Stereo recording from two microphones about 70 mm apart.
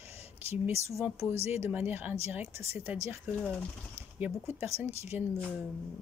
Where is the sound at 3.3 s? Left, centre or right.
Centre.